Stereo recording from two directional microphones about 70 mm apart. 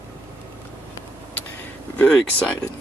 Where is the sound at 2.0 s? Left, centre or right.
Centre.